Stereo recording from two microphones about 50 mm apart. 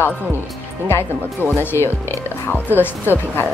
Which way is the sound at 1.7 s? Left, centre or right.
Left.